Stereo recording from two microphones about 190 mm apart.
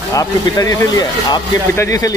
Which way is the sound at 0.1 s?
20° left (ahead or behind).